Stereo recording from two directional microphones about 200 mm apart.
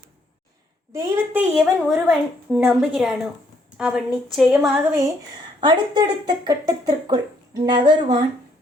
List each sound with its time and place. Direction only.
0.9 s speech: 10° right (ahead or behind)
5.5 s speech: 25° right (ahead or behind)